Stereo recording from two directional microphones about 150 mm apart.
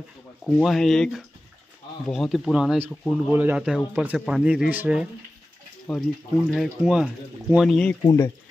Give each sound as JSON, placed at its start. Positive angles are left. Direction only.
{"t": 0.6, "sound": "speech", "side_deg": 0}
{"t": 5.9, "sound": "speech", "side_deg": 0}
{"t": 8.0, "sound": "speech", "side_deg": 20}